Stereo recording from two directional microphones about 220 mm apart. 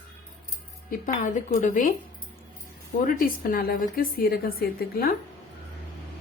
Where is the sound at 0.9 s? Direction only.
35° left (ahead or behind).